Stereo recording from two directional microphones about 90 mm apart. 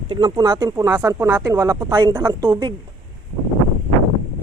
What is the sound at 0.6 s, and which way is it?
Speech, 35° right (ahead or behind).